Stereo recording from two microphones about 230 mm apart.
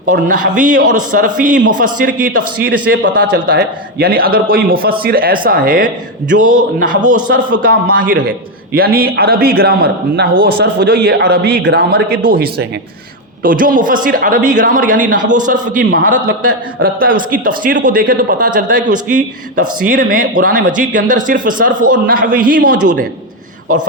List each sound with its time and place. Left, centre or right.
0.1 s a man's voice: right
12.2 s speech: right
13.4 s a man's voice: right